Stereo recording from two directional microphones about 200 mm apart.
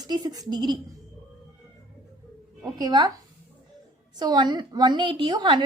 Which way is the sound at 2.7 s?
20° right (ahead or behind).